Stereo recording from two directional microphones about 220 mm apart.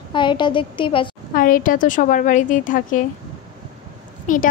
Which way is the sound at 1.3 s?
40° left (ahead or behind).